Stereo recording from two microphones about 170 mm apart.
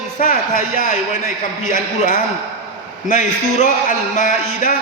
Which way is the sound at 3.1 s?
50° left (ahead or behind).